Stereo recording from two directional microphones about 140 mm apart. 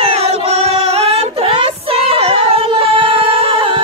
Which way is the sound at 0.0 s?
45° right (ahead or behind).